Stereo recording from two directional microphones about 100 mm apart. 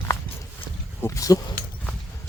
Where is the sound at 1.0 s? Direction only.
30° left (ahead or behind).